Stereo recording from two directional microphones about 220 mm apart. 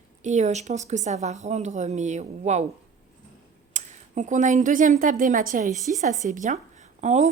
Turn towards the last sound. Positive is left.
turn(degrees=-30)  # may be behind; listen again after turning